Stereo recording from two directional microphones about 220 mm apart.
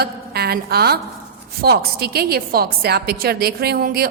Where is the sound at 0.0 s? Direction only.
45° right (ahead or behind).